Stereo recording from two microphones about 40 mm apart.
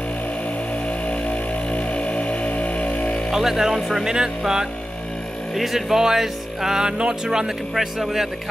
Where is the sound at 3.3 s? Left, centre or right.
Centre; by 7.5 s right.